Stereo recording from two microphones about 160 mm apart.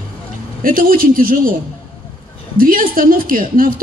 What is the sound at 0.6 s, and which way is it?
Speech, 60° right (ahead or behind).